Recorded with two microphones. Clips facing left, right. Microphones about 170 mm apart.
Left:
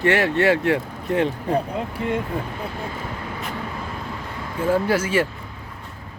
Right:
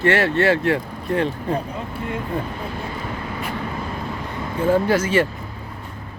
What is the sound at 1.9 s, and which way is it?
Speech, 90° left.